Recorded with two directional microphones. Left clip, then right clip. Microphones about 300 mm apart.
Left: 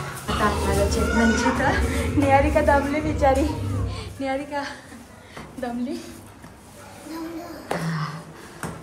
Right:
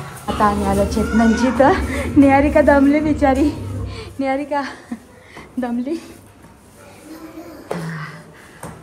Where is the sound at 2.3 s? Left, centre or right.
Right.